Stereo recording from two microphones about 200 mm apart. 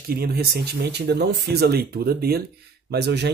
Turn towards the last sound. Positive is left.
turn(degrees=-55)  # may be behind; listen again after turning